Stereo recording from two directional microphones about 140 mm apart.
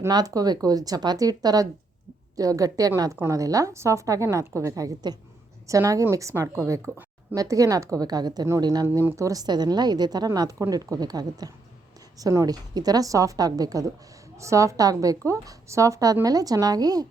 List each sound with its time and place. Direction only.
0.1 s a woman's voice: 25° right (ahead or behind)